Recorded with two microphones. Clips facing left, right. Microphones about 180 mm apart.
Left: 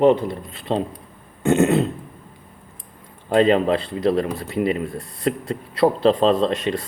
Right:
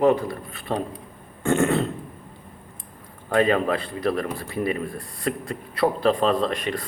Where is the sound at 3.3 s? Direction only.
25° left (ahead or behind).